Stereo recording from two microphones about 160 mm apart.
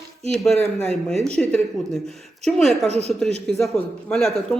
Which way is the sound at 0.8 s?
5° left (ahead or behind).